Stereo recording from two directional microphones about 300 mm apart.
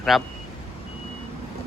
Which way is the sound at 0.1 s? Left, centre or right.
Centre.